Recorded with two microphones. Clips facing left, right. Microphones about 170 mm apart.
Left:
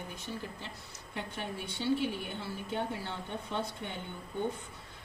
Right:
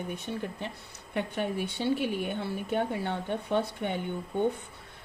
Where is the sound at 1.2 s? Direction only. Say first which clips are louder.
Right 9 dB; 65° right (ahead or behind).